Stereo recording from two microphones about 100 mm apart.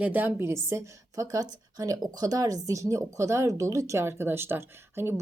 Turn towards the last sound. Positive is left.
turn(degrees=-25)  # may be behind; listen again after turning